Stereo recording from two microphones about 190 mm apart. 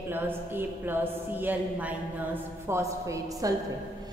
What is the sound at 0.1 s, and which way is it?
A woman's voice, 10° right (ahead or behind).